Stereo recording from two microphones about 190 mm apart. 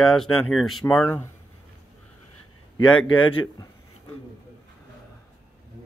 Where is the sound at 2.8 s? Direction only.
25° left (ahead or behind).